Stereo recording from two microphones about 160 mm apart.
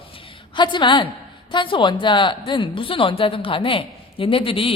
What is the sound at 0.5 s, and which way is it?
A woman's voice, 30° left (ahead or behind).